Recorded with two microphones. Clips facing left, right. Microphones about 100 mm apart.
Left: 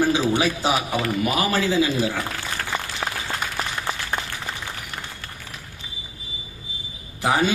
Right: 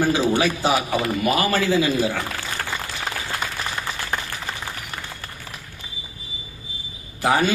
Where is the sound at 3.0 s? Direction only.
60° left (ahead or behind).